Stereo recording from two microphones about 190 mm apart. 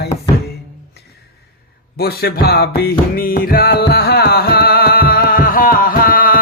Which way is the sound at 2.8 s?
50° left (ahead or behind).